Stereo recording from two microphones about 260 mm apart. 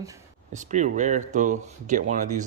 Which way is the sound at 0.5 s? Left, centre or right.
Right.